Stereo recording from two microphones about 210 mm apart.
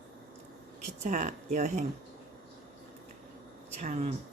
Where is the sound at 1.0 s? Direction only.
35° right (ahead or behind).